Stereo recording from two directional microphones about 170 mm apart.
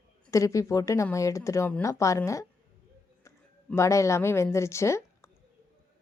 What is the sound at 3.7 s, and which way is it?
A woman's voice, 15° left (ahead or behind).